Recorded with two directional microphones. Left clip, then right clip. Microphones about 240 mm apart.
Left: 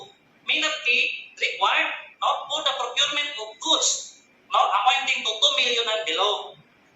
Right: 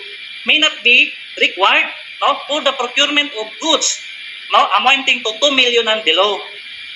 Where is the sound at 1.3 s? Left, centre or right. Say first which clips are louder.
Right 10 dB; right.